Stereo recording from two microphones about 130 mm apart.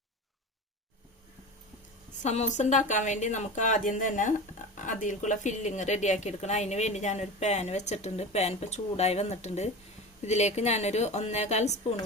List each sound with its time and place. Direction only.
2.2 s speech: 60° left (ahead or behind)